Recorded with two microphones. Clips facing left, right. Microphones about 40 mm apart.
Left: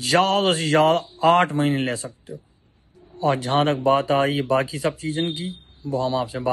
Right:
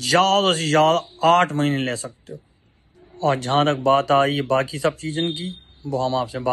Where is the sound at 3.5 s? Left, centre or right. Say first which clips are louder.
Right 2 dB; right.